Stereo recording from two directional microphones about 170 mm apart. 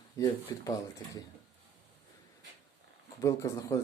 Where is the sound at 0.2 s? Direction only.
20° left (ahead or behind).